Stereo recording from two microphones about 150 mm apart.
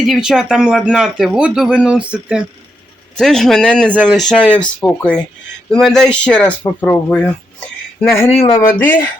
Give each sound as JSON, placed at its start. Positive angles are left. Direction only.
{"t": 0.0, "sound": "speech", "side_deg": 0}
{"t": 3.2, "sound": "speech", "side_deg": 5}